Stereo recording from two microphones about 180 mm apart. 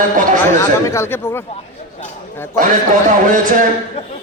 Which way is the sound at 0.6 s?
15° left (ahead or behind).